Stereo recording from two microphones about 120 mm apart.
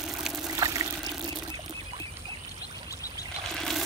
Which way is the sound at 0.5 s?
30° right (ahead or behind).